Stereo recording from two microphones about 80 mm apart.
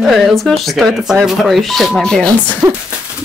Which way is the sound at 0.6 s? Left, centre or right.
Centre.